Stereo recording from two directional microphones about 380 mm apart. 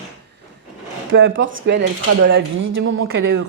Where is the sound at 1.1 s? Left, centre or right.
Right.